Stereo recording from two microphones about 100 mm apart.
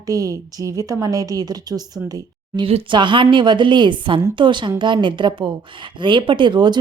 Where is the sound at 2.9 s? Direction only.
55° right (ahead or behind).